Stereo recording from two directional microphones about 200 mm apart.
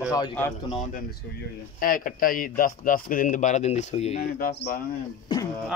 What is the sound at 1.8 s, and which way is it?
Speech, 45° left (ahead or behind).